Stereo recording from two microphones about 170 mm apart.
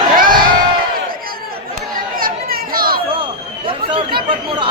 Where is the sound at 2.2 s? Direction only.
60° right (ahead or behind).